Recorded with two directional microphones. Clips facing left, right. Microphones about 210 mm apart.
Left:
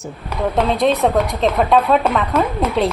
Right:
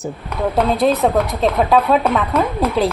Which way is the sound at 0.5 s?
5° right (ahead or behind).